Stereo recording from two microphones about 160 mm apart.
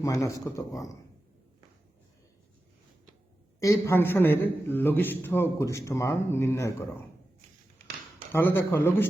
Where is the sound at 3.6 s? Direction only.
20° left (ahead or behind).